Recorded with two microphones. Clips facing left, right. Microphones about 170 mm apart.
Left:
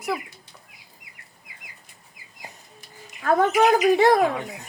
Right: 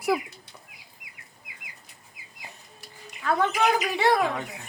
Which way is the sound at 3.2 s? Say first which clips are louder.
Left 5 dB; 45° left (ahead or behind).